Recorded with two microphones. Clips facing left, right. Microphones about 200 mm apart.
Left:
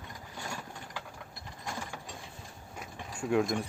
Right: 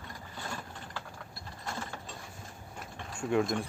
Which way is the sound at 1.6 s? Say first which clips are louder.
Even; 15° left (ahead or behind).